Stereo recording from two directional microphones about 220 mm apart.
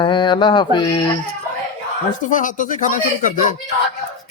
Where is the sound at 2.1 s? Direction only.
35° left (ahead or behind).